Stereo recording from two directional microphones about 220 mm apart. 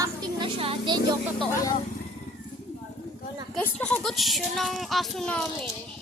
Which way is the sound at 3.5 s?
5° left (ahead or behind).